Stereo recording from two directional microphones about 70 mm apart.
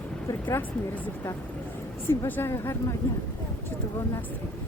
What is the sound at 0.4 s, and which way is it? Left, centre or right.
Speech, left.